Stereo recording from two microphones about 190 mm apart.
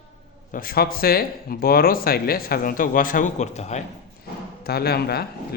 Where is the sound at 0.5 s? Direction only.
50° left (ahead or behind).